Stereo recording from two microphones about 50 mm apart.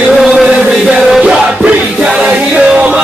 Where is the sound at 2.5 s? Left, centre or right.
Right.